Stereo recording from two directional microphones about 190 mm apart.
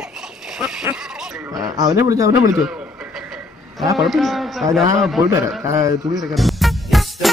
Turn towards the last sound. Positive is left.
turn(degrees=0)  # may be behind; listen again after turning